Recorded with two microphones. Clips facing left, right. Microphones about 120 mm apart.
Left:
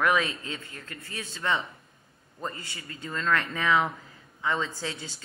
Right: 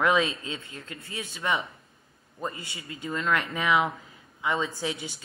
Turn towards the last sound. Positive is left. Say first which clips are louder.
# right 4 dB
turn(degrees=-15)  # may be behind; listen again after turning